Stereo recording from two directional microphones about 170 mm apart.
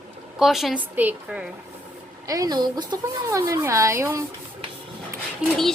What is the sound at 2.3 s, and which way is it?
Speech, 20° right (ahead or behind).